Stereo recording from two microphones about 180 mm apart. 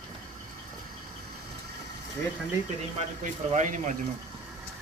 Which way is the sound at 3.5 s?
45° right (ahead or behind).